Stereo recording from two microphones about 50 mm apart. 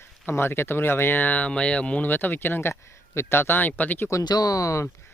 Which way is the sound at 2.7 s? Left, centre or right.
Left.